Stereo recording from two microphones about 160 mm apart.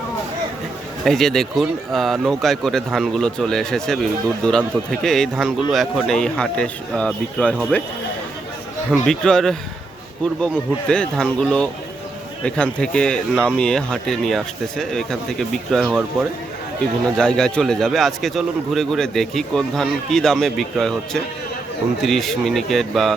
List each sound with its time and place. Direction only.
1.0 s speech: centre (ahead or behind)
8.9 s speech: 5° left (ahead or behind)
17.2 s speech: 5° left (ahead or behind)